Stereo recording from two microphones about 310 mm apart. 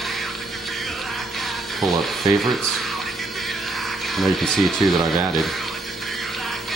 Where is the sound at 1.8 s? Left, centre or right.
Centre.